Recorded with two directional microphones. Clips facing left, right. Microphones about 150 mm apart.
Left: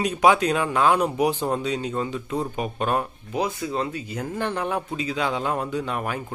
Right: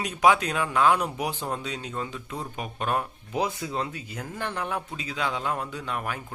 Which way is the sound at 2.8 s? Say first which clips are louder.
Left 3 dB; 20° left (ahead or behind).